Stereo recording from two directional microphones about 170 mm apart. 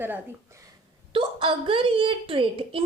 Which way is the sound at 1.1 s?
30° right (ahead or behind).